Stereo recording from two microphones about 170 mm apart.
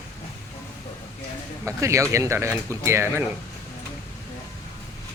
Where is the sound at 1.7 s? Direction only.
15° right (ahead or behind).